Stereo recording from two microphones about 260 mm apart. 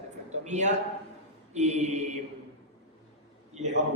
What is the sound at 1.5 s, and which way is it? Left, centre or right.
Speech, right.